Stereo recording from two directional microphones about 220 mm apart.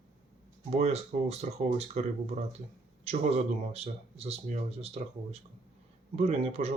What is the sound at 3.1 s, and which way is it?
Speech, 30° right (ahead or behind).